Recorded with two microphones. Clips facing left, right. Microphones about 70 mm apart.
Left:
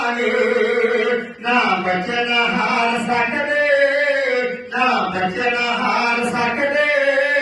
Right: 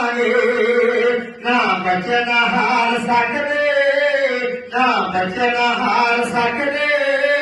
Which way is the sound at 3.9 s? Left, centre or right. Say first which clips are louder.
Right 2 dB; right.